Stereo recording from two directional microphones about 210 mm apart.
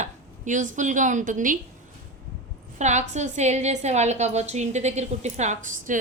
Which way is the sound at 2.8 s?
35° right (ahead or behind).